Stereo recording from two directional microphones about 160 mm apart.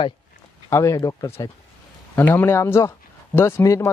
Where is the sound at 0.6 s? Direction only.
20° left (ahead or behind).